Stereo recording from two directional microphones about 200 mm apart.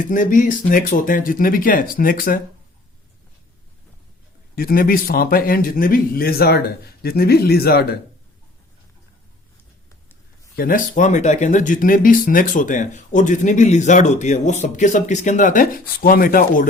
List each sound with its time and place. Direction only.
0.0 s speech: 40° left (ahead or behind)
4.5 s speech: 50° left (ahead or behind)
10.6 s speech: 45° left (ahead or behind)